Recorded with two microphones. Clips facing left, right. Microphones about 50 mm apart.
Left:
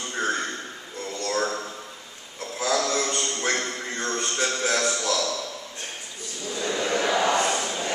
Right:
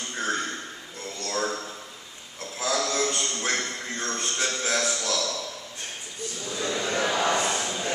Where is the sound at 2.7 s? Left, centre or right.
Centre.